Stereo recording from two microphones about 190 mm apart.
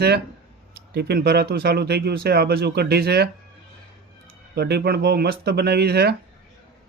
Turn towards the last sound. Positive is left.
turn(degrees=-55)  # may be behind; listen again after turning